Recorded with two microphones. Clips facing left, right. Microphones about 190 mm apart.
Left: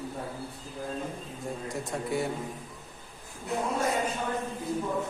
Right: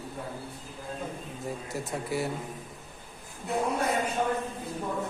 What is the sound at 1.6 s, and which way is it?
Speech, centre (ahead or behind).